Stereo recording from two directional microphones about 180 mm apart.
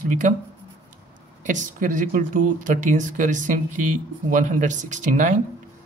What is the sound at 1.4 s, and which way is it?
Speech, 45° right (ahead or behind).